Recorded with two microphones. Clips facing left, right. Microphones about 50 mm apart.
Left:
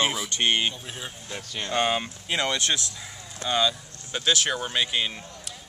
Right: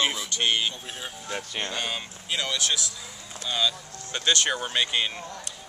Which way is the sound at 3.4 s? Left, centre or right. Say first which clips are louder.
Left 3 dB; centre.